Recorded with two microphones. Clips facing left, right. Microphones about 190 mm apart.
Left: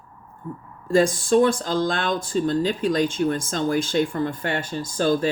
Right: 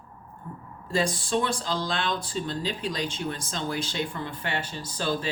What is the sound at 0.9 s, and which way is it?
Speech, 50° left (ahead or behind).